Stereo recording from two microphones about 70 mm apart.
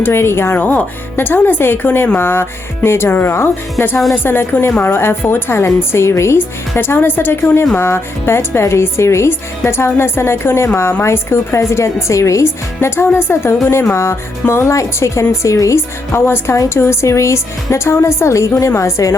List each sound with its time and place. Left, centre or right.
0.0 s a woman's voice: left